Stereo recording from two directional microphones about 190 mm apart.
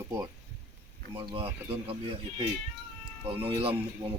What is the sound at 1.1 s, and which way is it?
Speech, 25° right (ahead or behind).